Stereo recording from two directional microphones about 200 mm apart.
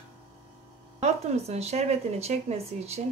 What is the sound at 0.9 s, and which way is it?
Speech, 35° right (ahead or behind).